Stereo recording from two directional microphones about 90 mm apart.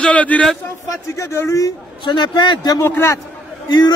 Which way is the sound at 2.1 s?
60° left (ahead or behind).